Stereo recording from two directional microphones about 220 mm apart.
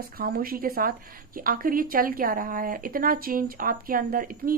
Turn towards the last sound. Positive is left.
turn(degrees=-40)  # may be behind; listen again after turning